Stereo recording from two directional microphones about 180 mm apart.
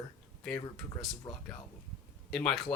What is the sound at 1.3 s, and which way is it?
Speech, 15° left (ahead or behind).